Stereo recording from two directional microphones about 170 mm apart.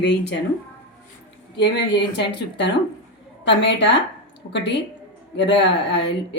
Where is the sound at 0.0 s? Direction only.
90° left.